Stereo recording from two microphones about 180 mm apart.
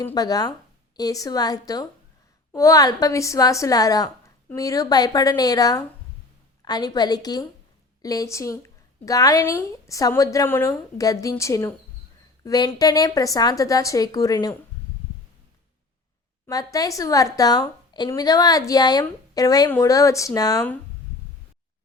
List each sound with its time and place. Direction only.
0.0 s a woman's voice: 20° left (ahead or behind)
16.5 s a woman's voice: 20° left (ahead or behind)